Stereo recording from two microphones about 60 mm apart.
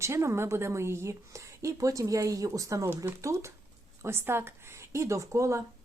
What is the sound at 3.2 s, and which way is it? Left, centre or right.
Speech, right.